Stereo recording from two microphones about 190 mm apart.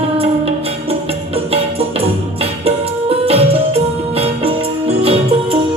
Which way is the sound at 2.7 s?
30° right (ahead or behind).